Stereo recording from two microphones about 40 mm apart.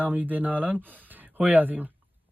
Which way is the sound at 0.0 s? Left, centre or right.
Right.